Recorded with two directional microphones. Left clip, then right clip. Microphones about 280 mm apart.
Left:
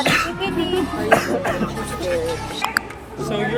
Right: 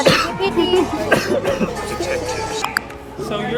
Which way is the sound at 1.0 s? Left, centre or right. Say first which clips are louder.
Even; centre.